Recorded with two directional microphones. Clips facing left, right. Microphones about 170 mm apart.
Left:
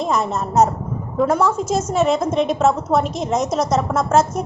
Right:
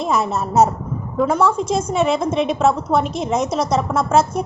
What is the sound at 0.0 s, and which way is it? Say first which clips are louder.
A woman's voice: right 1 dB; centre (ahead or behind).